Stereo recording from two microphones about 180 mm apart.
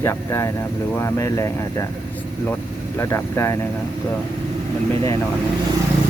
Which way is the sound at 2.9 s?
15° left (ahead or behind).